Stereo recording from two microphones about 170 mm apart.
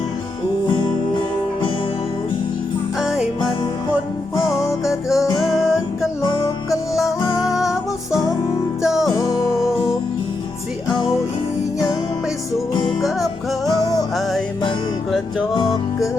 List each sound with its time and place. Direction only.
3.0 s music: 5° right (ahead or behind)
4.4 s music: 20° left (ahead or behind)
5.0 s music: centre (ahead or behind)
6.2 s music: 25° left (ahead or behind)
7.5 s music: centre (ahead or behind)
8.8 s music: 5° right (ahead or behind)
9.0 s music: 20° left (ahead or behind)
13.7 s music: 20° left (ahead or behind)
15.5 s music: 25° left (ahead or behind)